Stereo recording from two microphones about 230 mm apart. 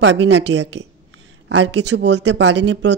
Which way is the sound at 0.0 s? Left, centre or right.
Right.